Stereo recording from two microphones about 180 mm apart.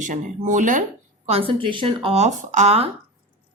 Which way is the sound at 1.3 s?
30° right (ahead or behind).